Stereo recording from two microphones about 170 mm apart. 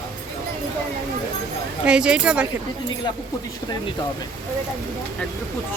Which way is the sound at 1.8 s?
5° right (ahead or behind).